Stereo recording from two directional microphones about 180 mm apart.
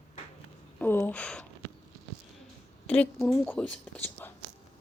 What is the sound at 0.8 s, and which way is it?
Speech, 10° left (ahead or behind).